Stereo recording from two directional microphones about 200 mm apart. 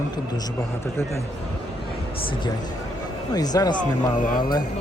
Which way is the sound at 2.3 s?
20° left (ahead or behind).